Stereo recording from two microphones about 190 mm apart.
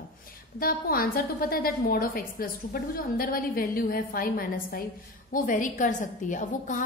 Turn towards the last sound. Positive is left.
turn(degrees=40)  # may be behind; listen again after turning